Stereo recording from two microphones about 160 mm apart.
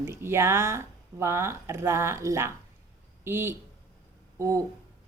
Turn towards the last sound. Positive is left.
turn(degrees=-20)  # may be behind; listen again after turning